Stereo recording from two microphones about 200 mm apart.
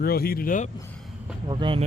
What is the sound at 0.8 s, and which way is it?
Vehicle, 5° left (ahead or behind).